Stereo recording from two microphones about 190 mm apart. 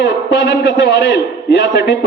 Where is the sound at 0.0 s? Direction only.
65° left (ahead or behind).